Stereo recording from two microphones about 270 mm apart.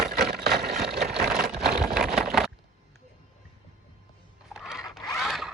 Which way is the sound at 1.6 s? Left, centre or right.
Centre.